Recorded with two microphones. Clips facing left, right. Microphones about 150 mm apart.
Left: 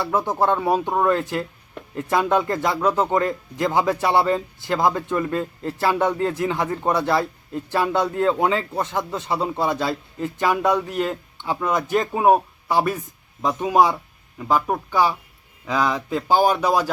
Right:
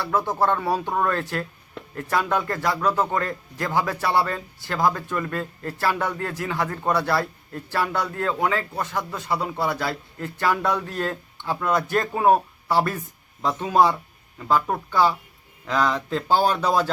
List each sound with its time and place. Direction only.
0.0 s speech: 20° left (ahead or behind)